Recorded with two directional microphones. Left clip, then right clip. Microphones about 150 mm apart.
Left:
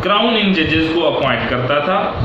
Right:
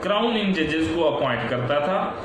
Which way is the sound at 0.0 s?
20° right (ahead or behind).